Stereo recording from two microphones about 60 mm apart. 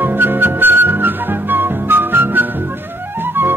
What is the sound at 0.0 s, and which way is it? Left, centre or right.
Music, right.